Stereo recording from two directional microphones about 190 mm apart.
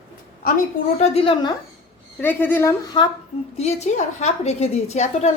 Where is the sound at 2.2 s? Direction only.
10° left (ahead or behind).